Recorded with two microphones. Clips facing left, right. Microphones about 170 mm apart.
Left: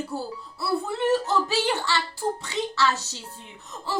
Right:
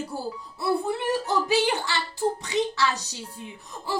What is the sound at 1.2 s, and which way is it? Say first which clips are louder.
A woman's voice: right 1 dB; 15° right (ahead or behind).